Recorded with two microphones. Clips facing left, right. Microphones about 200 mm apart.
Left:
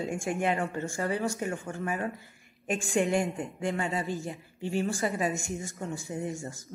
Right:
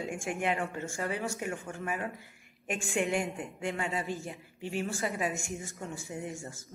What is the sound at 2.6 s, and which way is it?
A woman's voice, 35° left (ahead or behind).